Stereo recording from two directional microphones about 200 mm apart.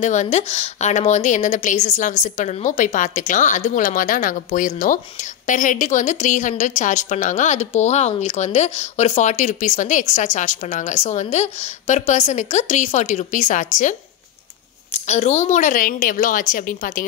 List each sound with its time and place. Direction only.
0.0 s a woman's voice: 35° left (ahead or behind)
15.0 s a woman's voice: 35° left (ahead or behind)